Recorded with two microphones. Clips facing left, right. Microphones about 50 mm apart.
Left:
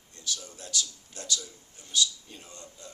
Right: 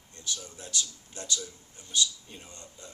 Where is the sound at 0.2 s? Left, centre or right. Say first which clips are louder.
Left 1 dB; right.